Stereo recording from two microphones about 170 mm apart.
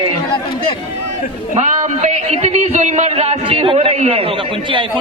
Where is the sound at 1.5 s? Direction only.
45° right (ahead or behind).